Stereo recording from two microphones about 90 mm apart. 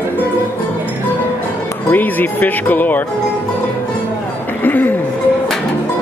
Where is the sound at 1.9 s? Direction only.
20° left (ahead or behind).